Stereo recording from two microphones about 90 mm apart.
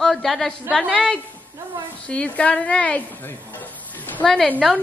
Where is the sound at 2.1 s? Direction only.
15° left (ahead or behind).